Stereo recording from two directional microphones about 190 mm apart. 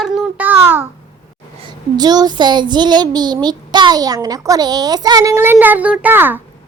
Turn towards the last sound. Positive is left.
turn(degrees=-10)  # may be behind; listen again after turning